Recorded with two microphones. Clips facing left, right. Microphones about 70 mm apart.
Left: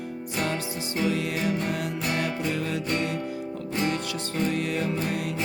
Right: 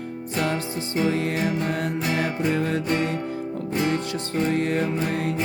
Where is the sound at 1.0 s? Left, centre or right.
Right.